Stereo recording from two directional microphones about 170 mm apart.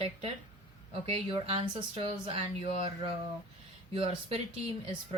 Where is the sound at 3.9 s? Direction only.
30° right (ahead or behind).